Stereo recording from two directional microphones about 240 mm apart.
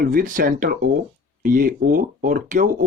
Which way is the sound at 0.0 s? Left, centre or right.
Right.